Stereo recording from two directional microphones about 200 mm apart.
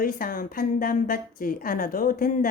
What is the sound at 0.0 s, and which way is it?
A woman's voice, 45° left (ahead or behind).